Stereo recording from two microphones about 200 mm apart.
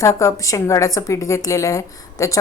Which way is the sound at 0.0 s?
15° left (ahead or behind).